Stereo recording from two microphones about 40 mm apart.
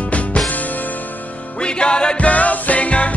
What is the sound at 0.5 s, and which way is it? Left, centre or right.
Music, left.